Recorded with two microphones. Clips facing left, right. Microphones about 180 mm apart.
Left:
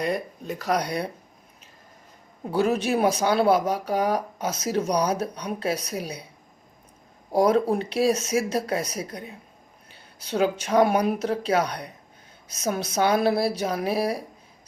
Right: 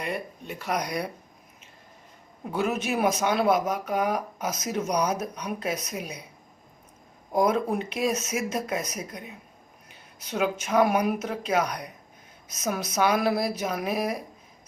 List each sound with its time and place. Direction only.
0.0 s speech: 40° left (ahead or behind)
2.4 s speech: 35° left (ahead or behind)
7.3 s speech: 35° left (ahead or behind)